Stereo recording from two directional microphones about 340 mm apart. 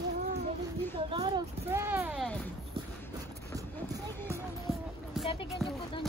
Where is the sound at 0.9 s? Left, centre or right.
Centre.